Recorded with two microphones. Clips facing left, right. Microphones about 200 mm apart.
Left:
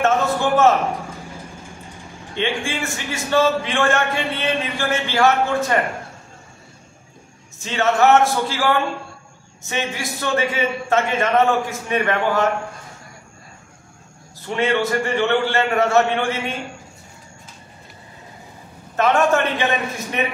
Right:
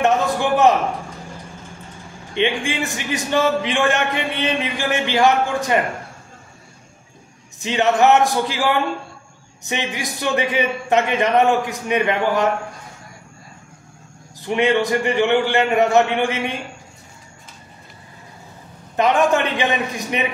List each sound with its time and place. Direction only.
0.0 s a sound: 15° right (ahead or behind)
2.3 s a man's voice: 20° right (ahead or behind)
7.5 s a man's voice: 15° right (ahead or behind)
14.5 s a man's voice: 15° right (ahead or behind)
18.9 s a man's voice: 15° right (ahead or behind)